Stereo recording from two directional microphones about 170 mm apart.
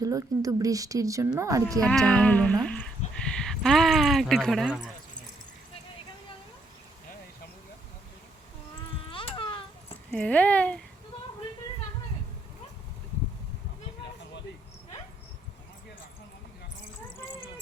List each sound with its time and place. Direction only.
0.0 s speech: 20° right (ahead or behind)
1.8 s speech: 5° left (ahead or behind)
9.0 s baby cry: 30° left (ahead or behind)
10.1 s speech: 5° left (ahead or behind)